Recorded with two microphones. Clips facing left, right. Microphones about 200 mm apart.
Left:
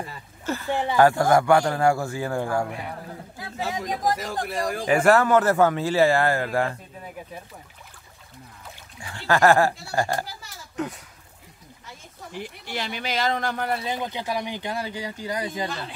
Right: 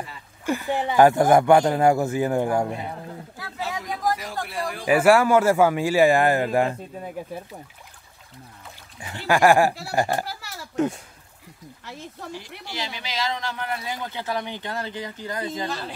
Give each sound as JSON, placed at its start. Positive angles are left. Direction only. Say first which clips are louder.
{"t": 0.5, "sound": "speech", "louder": "right 1 dB", "side_deg": -15}
{"t": 3.3, "sound": "a sound", "louder": "left 2 dB", "side_deg": 20}
{"t": 4.2, "sound": "speech", "louder": "left 2 dB", "side_deg": 45}
{"t": 4.8, "sound": "speech", "louder": "right 2 dB", "side_deg": -10}
{"t": 9.0, "sound": "speech", "louder": "right 1 dB", "side_deg": -15}
{"t": 10.2, "sound": "a sound", "louder": "right 5 dB", "side_deg": -70}
{"t": 12.3, "sound": "speech", "louder": "left 5 dB", "side_deg": 55}
{"t": 13.7, "sound": "speech", "louder": "left 3 dB", "side_deg": 25}